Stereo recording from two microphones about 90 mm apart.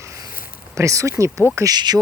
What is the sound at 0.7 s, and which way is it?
Speech, 35° right (ahead or behind).